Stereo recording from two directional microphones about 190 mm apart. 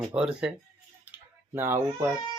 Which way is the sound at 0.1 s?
5° right (ahead or behind).